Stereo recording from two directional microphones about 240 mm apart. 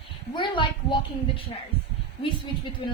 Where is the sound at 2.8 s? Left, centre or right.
Centre.